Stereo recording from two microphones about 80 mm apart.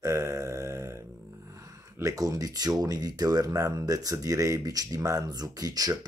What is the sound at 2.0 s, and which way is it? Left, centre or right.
Speech, right.